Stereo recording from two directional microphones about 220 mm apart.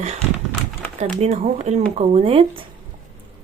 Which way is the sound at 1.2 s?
30° right (ahead or behind).